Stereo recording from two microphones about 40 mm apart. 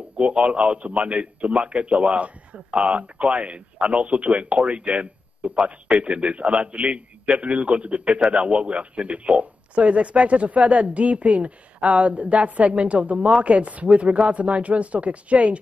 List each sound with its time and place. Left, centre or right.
0.2 s a man's voice: right